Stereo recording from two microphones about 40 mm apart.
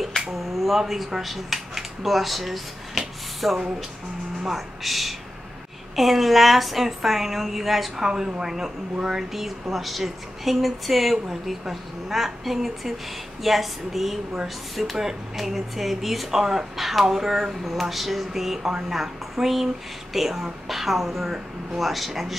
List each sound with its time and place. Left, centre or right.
0.3 s speech: centre
8.1 s speech: centre
20.6 s a sound: centre
21.7 s speech: centre